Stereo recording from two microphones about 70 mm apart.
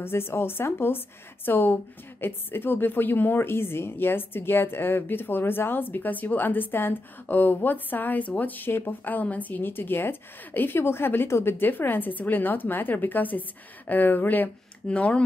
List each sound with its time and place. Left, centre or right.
0.0 s a woman's voice: left; by 15.2 s centre